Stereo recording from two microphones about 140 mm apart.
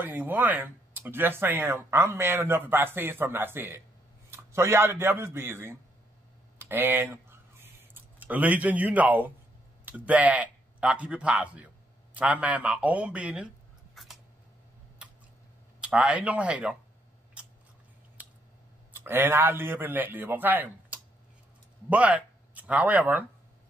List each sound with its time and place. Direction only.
0.0 s speech: 15° right (ahead or behind)
6.6 s a sound: 15° right (ahead or behind)
8.2 s speech: 10° right (ahead or behind)
13.9 s a sound: centre (ahead or behind)
15.8 s speech: 5° right (ahead or behind)
17.4 s scissors: 5° right (ahead or behind)
18.9 s speech: 15° right (ahead or behind)